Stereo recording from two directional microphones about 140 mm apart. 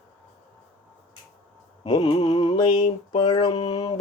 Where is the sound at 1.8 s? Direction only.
35° left (ahead or behind).